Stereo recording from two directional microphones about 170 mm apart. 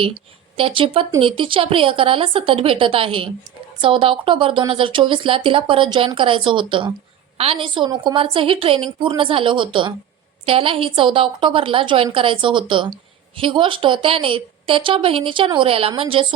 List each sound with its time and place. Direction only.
0.5 s a woman's voice: 30° right (ahead or behind)